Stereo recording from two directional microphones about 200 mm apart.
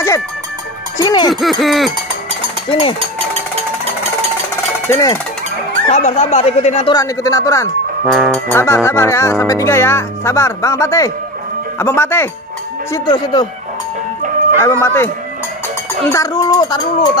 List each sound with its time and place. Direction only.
0.9 s speech: 20° left (ahead or behind)
1.3 s a sound: centre (ahead or behind)
2.7 s speech: 25° left (ahead or behind)
4.8 s speech: 15° left (ahead or behind)
5.9 s speech: 35° left (ahead or behind)
7.0 s speech: 15° left (ahead or behind)
8.1 s speech: centre (ahead or behind)
12.9 s speech: 20° left (ahead or behind)
14.6 s speech: 10° left (ahead or behind)
16.1 s speech: 15° left (ahead or behind)